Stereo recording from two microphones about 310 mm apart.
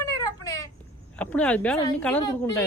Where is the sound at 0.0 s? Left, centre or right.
Centre.